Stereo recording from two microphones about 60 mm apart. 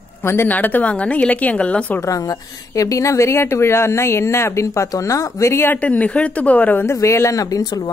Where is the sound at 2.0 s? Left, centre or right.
Left.